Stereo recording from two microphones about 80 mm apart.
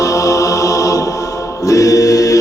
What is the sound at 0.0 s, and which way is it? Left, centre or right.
Music, left.